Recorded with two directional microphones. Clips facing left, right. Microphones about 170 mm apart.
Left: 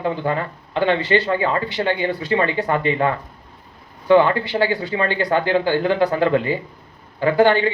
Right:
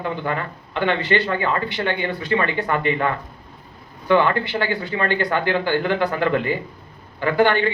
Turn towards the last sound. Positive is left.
turn(degrees=40)  # may be behind; listen again after turning